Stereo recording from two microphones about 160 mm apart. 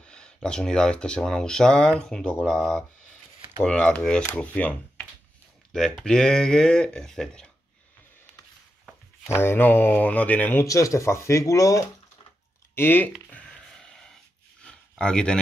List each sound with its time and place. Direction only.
0.0 s speech: 5° left (ahead or behind)
9.3 s speech: 15° left (ahead or behind)
13.3 s a sound: 5° left (ahead or behind)